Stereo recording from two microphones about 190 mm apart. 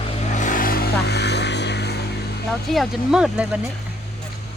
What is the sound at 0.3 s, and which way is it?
Vehicle, 45° left (ahead or behind).